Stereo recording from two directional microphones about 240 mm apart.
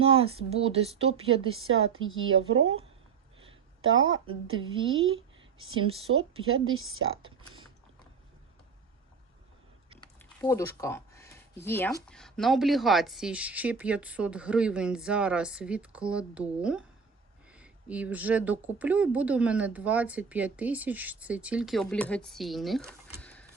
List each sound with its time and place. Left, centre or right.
0.0 s speech: right
1.5 s speech: right
4.3 s speech: right
4.9 s speech: right
5.8 s speech: right
6.5 s speech: right
7.3 s typing: centre
10.0 s a sound: centre
12.0 s speech: centre
23.2 s printer: centre